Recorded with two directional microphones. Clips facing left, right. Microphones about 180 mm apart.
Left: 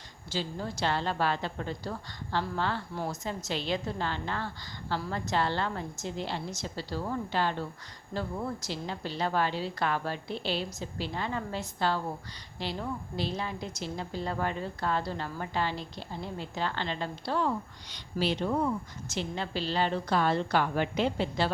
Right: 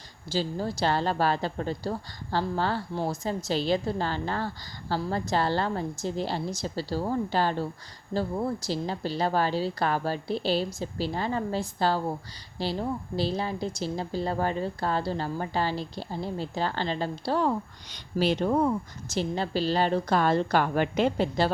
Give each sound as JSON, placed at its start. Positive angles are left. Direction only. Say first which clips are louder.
{"t": 0.3, "sound": "a woman's voice", "louder": "right 5 dB", "side_deg": -35}